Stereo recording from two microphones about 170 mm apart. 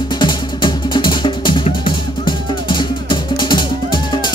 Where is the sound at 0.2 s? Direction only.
25° left (ahead or behind).